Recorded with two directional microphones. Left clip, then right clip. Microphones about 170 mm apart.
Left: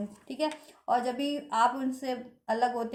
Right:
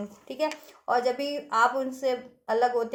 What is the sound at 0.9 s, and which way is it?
Speech, 20° right (ahead or behind).